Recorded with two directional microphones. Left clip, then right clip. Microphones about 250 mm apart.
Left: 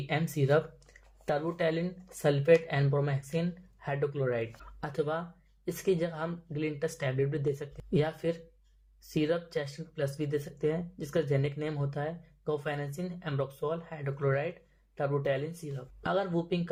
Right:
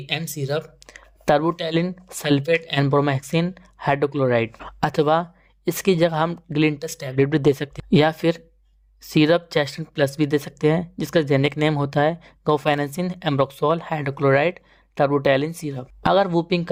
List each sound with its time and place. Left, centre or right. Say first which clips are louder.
0.1 s speech: right 3 dB; centre
0.9 s a sound: right 14 dB; right
1.7 s speech: right 12 dB; right